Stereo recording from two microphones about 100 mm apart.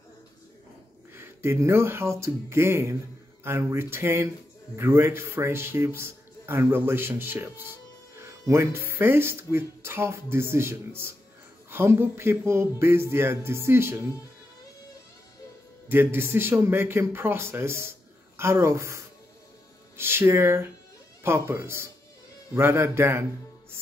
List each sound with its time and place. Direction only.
1.1 s speech: 25° right (ahead or behind)
15.9 s speech: 20° right (ahead or behind)